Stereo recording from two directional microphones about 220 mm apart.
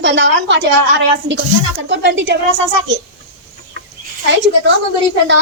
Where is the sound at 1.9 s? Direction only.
55° right (ahead or behind).